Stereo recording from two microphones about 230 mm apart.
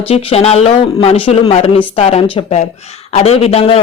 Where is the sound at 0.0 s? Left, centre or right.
Left.